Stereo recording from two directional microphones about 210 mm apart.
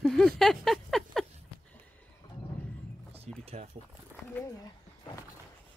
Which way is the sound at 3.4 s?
30° right (ahead or behind).